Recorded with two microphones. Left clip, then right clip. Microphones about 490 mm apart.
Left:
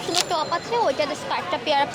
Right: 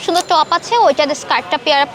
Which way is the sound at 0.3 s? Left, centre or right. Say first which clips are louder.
Right 11 dB; right.